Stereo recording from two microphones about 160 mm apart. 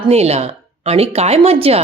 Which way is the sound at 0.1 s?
40° right (ahead or behind).